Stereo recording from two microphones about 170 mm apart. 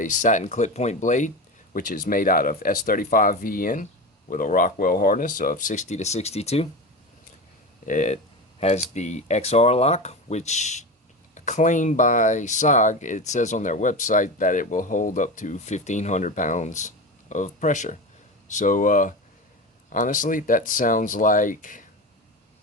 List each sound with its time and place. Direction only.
0.0 s speech: 50° left (ahead or behind)
7.9 s speech: 45° left (ahead or behind)